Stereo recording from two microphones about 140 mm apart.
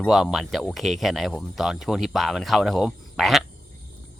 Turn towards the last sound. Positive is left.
turn(degrees=0)  # may be behind; listen again after turning